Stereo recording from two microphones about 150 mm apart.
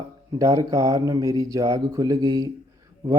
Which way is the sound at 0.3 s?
20° right (ahead or behind).